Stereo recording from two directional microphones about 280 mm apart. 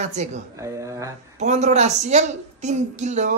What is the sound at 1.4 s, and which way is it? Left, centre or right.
A woman's voice, right.